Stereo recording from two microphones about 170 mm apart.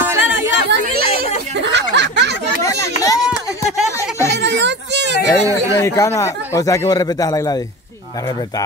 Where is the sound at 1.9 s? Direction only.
85° right.